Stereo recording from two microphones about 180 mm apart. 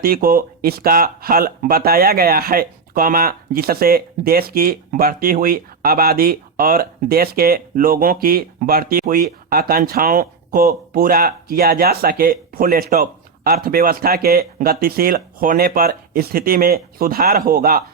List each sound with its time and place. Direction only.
0.0 s speech: 55° right (ahead or behind)